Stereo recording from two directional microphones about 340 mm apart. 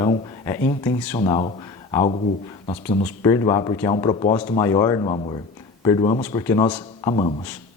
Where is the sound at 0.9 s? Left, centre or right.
Centre.